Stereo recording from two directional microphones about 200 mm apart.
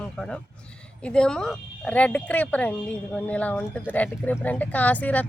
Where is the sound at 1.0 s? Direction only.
5° left (ahead or behind).